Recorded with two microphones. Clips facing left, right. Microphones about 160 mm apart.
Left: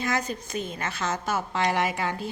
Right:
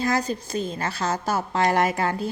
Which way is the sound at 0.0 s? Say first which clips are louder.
Right 4 dB; 35° right (ahead or behind).